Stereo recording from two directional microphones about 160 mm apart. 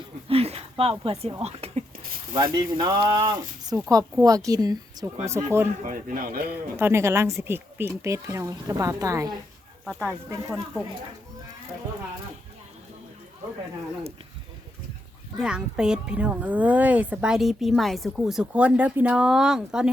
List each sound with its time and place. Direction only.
0.3 s a sound: 40° right (ahead or behind)
1.4 s speech: 40° right (ahead or behind)
2.3 s speech: 25° right (ahead or behind)
5.8 s speech: 60° right (ahead or behind)
6.7 s speech: 15° right (ahead or behind)
9.8 s speech: centre (ahead or behind)
15.4 s speech: 5° right (ahead or behind)